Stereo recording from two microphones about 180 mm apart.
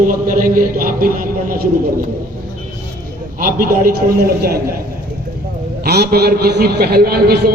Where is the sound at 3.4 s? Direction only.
50° right (ahead or behind).